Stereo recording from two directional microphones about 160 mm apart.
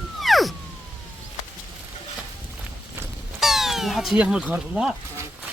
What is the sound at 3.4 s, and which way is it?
Speech, centre (ahead or behind).